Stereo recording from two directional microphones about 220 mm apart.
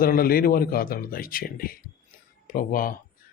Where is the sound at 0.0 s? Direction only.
40° left (ahead or behind).